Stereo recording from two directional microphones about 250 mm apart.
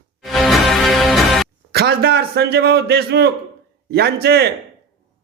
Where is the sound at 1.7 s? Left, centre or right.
Right.